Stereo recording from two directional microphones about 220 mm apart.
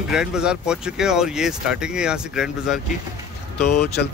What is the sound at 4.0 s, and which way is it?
Speech, 50° left (ahead or behind).